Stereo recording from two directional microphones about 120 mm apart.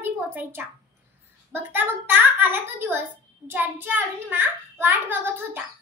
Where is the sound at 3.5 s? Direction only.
15° right (ahead or behind).